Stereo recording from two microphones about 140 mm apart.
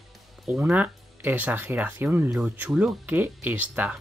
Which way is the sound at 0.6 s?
10° right (ahead or behind).